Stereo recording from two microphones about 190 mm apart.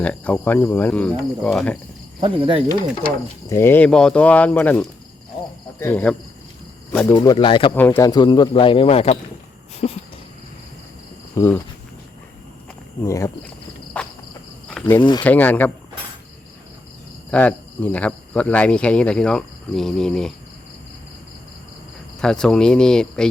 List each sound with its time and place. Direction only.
0.0 s speech: 5° left (ahead or behind)
2.2 s cricket: 30° right (ahead or behind)
3.5 s speech: 10° left (ahead or behind)
7.2 s speech: 25° left (ahead or behind)
7.8 s speech: 10° left (ahead or behind); by 9.1 s 30° left (ahead or behind)
9.8 s wheeze: 35° left (ahead or behind)
11.3 s speech: 10° left (ahead or behind)
13.1 s speech: 15° left (ahead or behind)
14.7 s cricket: 5° left (ahead or behind)
15.2 s speech: 10° left (ahead or behind)
17.3 s speech: 10° left (ahead or behind)
22.2 s speech: 5° left (ahead or behind)